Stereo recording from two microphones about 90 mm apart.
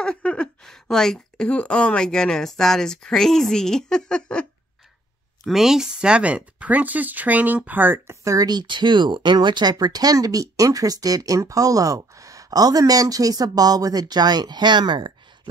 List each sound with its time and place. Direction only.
0.0 s a woman's voice: 10° left (ahead or behind)
5.4 s speech: 5° right (ahead or behind); by 8.2 s 20° right (ahead or behind)
8.2 s speech: 40° right (ahead or behind); by 15.1 s 60° right (ahead or behind)